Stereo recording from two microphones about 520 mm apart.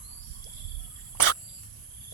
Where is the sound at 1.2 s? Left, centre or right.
Left.